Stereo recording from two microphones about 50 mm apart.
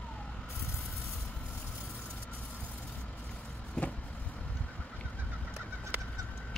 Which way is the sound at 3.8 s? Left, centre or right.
Left.